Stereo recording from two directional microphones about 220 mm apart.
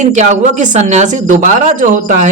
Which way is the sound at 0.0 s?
35° right (ahead or behind).